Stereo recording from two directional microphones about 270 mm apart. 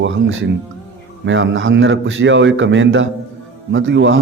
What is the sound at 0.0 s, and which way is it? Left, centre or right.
A man's voice, right.